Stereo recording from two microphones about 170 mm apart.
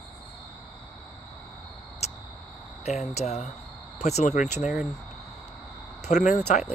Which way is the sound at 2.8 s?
40° left (ahead or behind).